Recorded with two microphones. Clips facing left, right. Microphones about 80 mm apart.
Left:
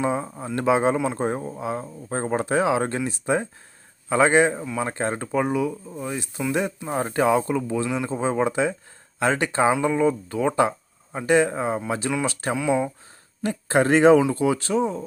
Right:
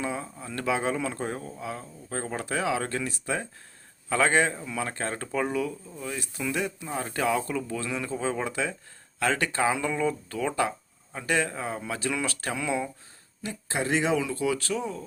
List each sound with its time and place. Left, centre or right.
0.0 s speech: left
12.5 s speech: centre
13.4 s speech: left
14.2 s speech: left